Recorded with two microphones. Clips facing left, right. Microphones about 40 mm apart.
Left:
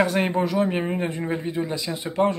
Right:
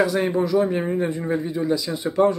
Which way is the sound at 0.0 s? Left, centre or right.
Left.